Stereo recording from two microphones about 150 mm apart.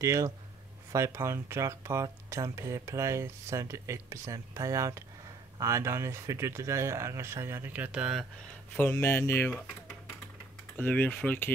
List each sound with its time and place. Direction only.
0.0 s speech: 20° right (ahead or behind); by 8.3 s 5° right (ahead or behind)
8.7 s speech: 10° left (ahead or behind)
10.8 s speech: 10° left (ahead or behind)